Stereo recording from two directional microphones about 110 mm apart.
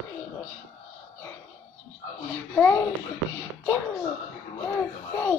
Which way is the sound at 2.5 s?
15° left (ahead or behind).